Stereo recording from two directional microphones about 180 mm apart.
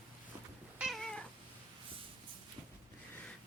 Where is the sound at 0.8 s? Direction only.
Centre (ahead or behind).